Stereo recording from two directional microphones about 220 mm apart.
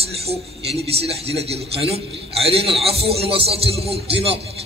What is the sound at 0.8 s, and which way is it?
A man's voice, 25° right (ahead or behind).